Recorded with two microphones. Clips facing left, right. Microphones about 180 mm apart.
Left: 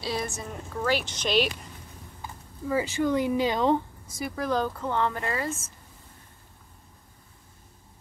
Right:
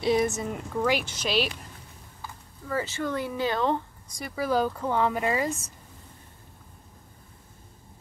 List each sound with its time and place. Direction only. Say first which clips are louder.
0.0 s a woman's voice: right 8 dB; 20° right (ahead or behind)
2.7 s speech: left 4 dB; 15° left (ahead or behind)
4.1 s speech: even; centre (ahead or behind)
4.5 s a woman's voice: right 3 dB; 10° right (ahead or behind)